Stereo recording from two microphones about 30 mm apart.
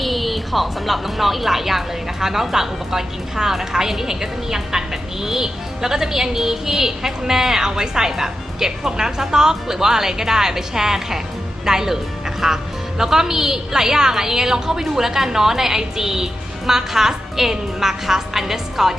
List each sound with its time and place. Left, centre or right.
0.0 s speech: centre